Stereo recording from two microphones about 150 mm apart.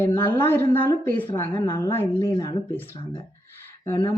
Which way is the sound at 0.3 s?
15° left (ahead or behind).